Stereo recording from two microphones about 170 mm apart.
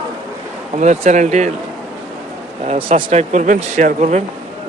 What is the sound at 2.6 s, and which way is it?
Speech, 40° right (ahead or behind).